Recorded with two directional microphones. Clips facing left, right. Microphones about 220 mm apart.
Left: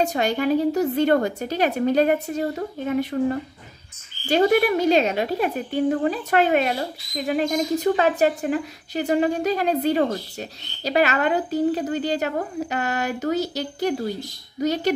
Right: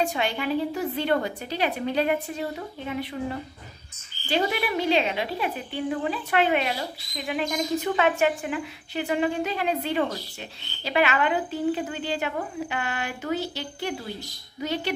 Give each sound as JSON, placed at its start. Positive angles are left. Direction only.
{"t": 0.0, "sound": "a woman's voice", "side_deg": 40}